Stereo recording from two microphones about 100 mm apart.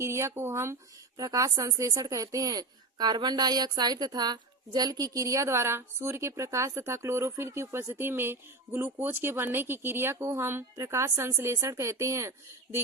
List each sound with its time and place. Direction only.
0.0 s speech: 25° right (ahead or behind)